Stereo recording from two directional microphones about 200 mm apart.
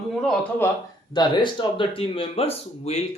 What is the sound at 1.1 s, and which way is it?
Speech, 20° left (ahead or behind).